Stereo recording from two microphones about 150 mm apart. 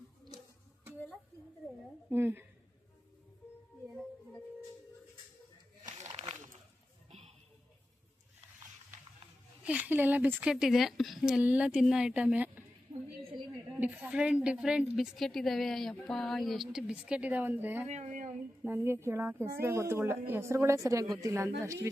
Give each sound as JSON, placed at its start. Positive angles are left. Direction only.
{"t": 2.0, "sound": "a woman's voice", "side_deg": -15}
{"t": 6.1, "sound": "a sound", "side_deg": -50}
{"t": 9.6, "sound": "a woman's voice", "side_deg": -10}
{"t": 13.7, "sound": "a woman's voice", "side_deg": -10}
{"t": 17.8, "sound": "speech", "side_deg": -50}
{"t": 18.6, "sound": "a woman's voice", "side_deg": -15}